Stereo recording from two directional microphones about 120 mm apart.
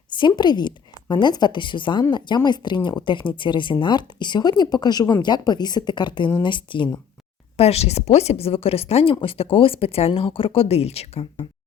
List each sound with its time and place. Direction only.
0.1 s a woman's voice: 40° left (ahead or behind)
7.5 s a woman's voice: 60° left (ahead or behind)